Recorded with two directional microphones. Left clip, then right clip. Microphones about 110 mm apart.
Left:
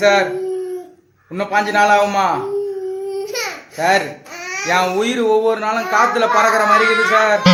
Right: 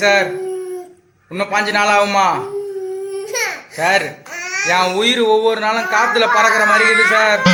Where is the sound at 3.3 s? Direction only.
15° left (ahead or behind).